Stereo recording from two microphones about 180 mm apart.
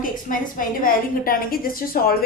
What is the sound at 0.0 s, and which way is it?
A woman's voice, 50° left (ahead or behind).